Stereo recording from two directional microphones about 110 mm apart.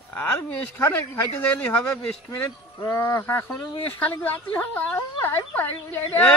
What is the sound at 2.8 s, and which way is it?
Speech, 25° left (ahead or behind).